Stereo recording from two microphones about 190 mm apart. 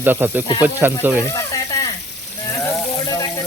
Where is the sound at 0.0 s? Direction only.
10° right (ahead or behind).